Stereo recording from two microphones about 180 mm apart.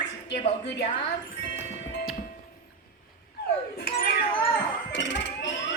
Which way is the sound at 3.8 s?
60° left (ahead or behind).